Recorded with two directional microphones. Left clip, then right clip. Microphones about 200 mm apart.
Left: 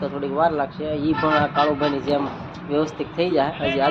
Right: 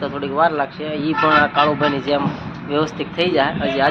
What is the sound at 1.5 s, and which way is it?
Speech, 25° right (ahead or behind).